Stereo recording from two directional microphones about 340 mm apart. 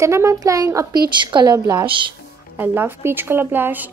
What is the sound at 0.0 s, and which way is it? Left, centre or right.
Speech, centre.